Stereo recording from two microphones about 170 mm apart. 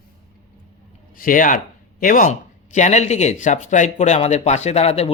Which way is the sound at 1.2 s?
55° left (ahead or behind).